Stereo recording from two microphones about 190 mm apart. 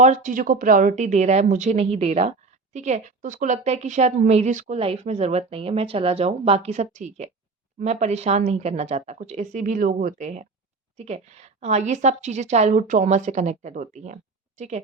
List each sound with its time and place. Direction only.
0.0 s a woman's voice: 40° right (ahead or behind)